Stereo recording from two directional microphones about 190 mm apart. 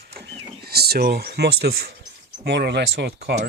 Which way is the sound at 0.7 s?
55° right (ahead or behind).